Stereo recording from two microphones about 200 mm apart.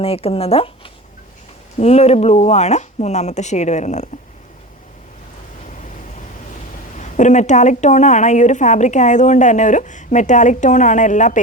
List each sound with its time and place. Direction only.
0.0 s speech: 30° left (ahead or behind)
1.8 s a woman's voice: 30° left (ahead or behind)
6.9 s a woman's voice: 35° left (ahead or behind)